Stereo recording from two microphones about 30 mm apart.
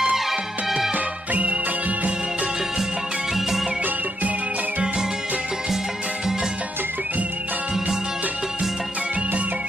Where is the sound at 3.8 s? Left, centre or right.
Right.